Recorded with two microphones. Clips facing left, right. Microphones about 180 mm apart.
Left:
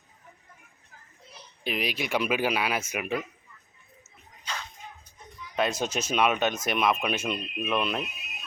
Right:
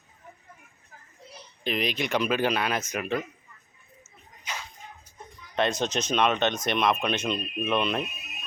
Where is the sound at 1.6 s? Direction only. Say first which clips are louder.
Right 2 dB; 5° left (ahead or behind).